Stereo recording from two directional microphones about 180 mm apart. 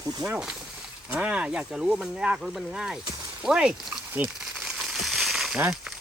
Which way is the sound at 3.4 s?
5° right (ahead or behind).